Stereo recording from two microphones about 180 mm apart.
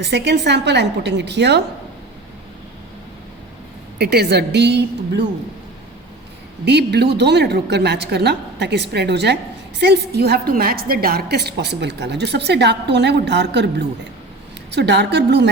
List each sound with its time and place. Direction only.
0.0 s a woman's voice: 70° right (ahead or behind)
3.9 s a woman's voice: 65° right (ahead or behind)
6.7 s a woman's voice: 65° right (ahead or behind)